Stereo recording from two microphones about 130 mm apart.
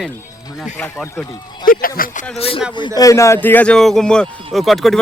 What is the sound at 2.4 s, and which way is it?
Speech, 45° left (ahead or behind).